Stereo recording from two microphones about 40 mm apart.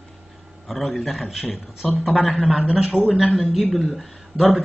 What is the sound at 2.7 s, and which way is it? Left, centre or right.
Speech, right.